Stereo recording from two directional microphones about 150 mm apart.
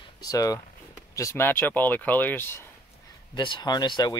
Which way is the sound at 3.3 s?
30° left (ahead or behind).